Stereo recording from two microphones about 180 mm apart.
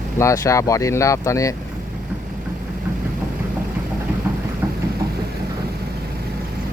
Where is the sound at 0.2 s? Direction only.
15° left (ahead or behind).